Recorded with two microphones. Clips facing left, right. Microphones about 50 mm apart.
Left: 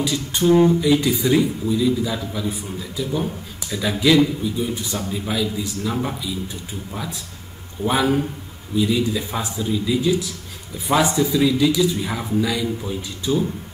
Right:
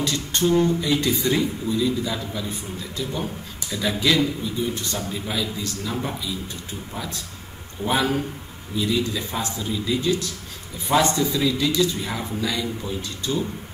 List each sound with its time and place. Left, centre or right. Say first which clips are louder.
0.0 s a man's voice: left 3 dB; centre
7.8 s a man's voice: left 3 dB; centre